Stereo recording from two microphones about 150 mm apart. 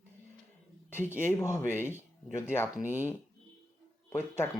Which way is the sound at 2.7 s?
10° right (ahead or behind).